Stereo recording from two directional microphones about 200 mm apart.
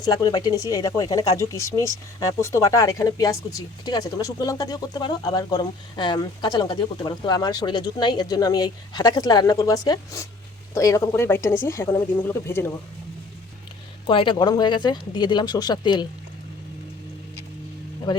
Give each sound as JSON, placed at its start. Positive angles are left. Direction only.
{"t": 0.0, "sound": "speech", "side_deg": 20}
{"t": 14.1, "sound": "speech", "side_deg": 25}